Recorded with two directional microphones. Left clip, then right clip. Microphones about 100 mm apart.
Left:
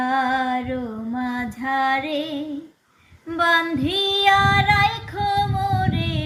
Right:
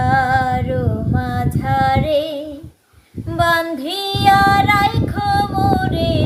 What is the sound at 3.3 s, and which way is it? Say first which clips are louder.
Female singing: right 3 dB; 35° right (ahead or behind).